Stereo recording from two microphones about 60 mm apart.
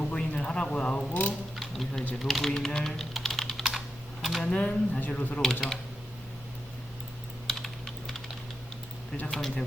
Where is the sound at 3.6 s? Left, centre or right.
Centre.